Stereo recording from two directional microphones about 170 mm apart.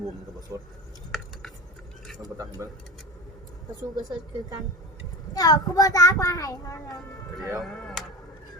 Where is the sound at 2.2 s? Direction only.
20° right (ahead or behind).